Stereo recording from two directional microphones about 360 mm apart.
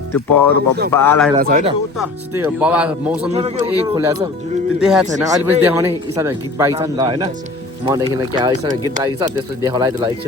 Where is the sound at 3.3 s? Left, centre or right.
Centre.